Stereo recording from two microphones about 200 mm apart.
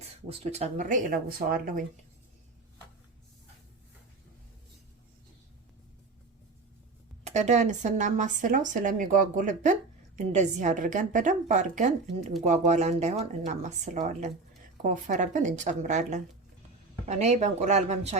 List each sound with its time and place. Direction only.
0.3 s speech: 30° right (ahead or behind)
7.3 s speech: 35° right (ahead or behind)